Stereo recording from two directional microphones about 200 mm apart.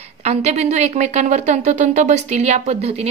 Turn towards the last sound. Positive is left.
turn(degrees=-30)  # may be behind; listen again after turning